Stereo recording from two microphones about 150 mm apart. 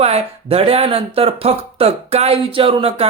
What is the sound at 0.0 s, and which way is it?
Speech, 40° right (ahead or behind).